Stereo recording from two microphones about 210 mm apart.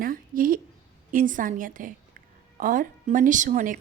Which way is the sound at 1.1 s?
40° right (ahead or behind).